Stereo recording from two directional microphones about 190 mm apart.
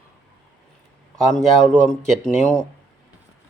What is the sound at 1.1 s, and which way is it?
A man's voice, 5° left (ahead or behind).